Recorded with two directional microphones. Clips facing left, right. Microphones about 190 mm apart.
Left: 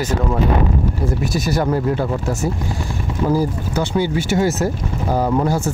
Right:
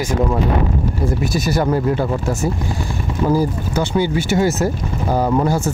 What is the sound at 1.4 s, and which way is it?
Speech, 5° right (ahead or behind).